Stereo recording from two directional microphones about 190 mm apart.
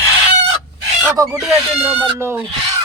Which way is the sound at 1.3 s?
5° right (ahead or behind).